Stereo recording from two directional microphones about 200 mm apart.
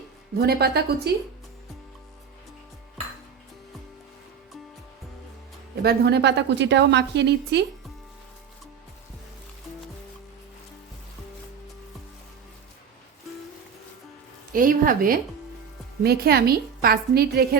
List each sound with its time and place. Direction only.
0.3 s a woman's voice: 50° right (ahead or behind)
5.8 s a woman's voice: 55° right (ahead or behind)
14.5 s a woman's voice: 45° right (ahead or behind)